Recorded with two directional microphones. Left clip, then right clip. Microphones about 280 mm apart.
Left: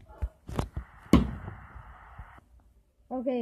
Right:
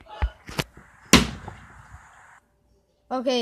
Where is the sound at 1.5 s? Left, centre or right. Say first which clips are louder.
Right 3 dB; right.